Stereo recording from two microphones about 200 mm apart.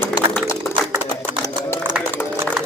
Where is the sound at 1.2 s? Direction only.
10° left (ahead or behind).